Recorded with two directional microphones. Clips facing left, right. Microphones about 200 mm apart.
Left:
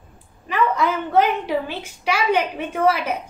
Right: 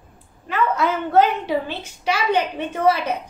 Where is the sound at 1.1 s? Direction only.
10° left (ahead or behind).